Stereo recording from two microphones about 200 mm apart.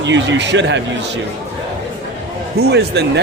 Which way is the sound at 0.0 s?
65° right (ahead or behind).